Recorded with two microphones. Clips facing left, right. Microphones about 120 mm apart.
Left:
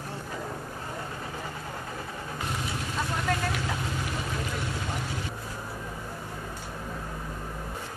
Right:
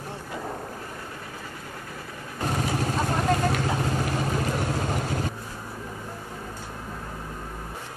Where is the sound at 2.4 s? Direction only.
45° right (ahead or behind).